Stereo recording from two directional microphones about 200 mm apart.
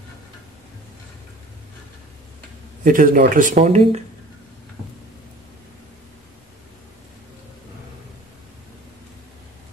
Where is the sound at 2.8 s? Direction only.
40° right (ahead or behind).